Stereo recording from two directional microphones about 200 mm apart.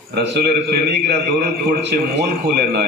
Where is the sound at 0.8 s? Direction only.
55° right (ahead or behind).